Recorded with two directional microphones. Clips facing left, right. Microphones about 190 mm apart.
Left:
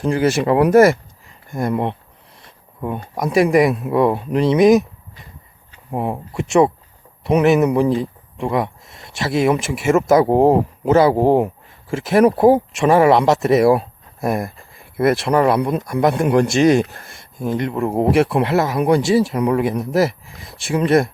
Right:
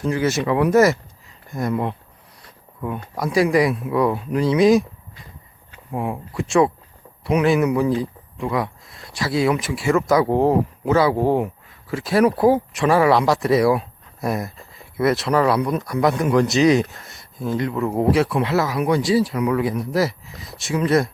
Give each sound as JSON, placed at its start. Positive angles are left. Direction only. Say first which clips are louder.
{"t": 0.0, "sound": "speech", "louder": "left 4 dB", "side_deg": 30}
{"t": 0.6, "sound": "a man's voice", "louder": "left 4 dB", "side_deg": 55}
{"t": 2.4, "sound": "speech", "louder": "left 2 dB", "side_deg": 25}
{"t": 6.0, "sound": "speech", "louder": "left 2 dB", "side_deg": 25}
{"t": 14.3, "sound": "a sound", "louder": "left 3 dB", "side_deg": 50}
{"t": 15.1, "sound": "speech", "louder": "left 2 dB", "side_deg": 30}
{"t": 16.1, "sound": "a man's voice", "louder": "left 2 dB", "side_deg": 55}
{"t": 17.4, "sound": "speech", "louder": "left 2 dB", "side_deg": 20}